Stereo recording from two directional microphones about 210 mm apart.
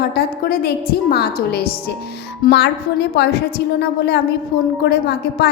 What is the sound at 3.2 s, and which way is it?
A woman's voice, 55° left (ahead or behind).